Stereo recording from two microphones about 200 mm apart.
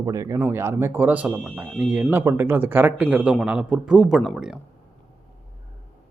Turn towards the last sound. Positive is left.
turn(degrees=0)  # may be behind; listen again after turning